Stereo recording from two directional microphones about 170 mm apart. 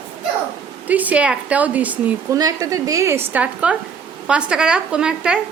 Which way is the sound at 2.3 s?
20° right (ahead or behind).